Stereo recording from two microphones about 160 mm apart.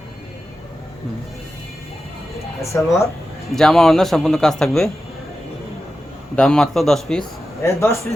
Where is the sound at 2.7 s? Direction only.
20° left (ahead or behind).